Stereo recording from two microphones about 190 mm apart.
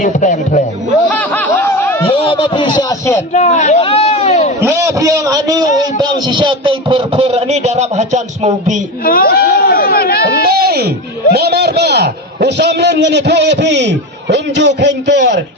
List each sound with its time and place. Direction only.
0.0 s a man's voice: 40° left (ahead or behind)
1.1 s snicker: 10° left (ahead or behind)
2.0 s speech: 30° left (ahead or behind)
3.3 s a man's voice: 35° left (ahead or behind)
4.6 s a man's voice: 15° right (ahead or behind); by 8.8 s 35° right (ahead or behind)
9.0 s speech: 50° left (ahead or behind)
10.4 s a man's voice: 55° right (ahead or behind)